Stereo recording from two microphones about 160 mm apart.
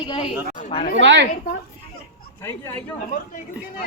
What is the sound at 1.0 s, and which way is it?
Speech, 90° right.